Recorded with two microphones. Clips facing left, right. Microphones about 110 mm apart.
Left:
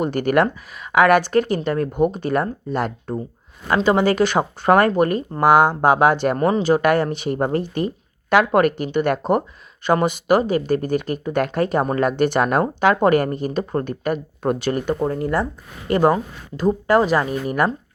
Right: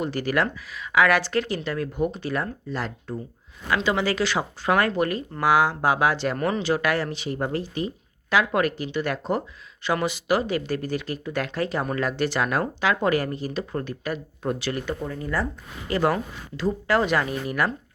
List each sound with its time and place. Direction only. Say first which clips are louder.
0.0 s speech: left 7 dB; 55° left (ahead or behind)
3.7 s speech: left 7 dB; 45° left (ahead or behind)
6.3 s speech: left 7 dB; 35° left (ahead or behind)